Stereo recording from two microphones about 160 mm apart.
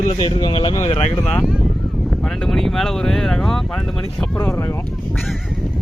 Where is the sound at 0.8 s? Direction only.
40° left (ahead or behind).